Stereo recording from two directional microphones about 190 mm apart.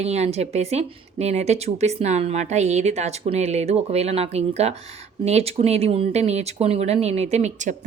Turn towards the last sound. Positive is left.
turn(degrees=-40)  # may be behind; listen again after turning